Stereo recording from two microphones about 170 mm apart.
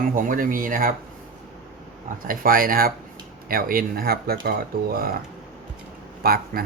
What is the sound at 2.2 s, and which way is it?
Speech, 55° right (ahead or behind).